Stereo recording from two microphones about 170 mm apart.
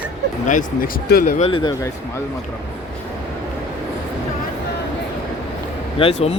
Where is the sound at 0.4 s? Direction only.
50° left (ahead or behind).